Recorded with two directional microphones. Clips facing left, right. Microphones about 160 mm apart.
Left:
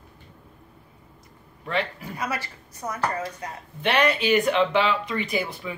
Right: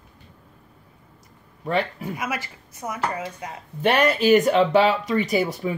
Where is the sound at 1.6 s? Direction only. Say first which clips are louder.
Right 4 dB; 40° right (ahead or behind).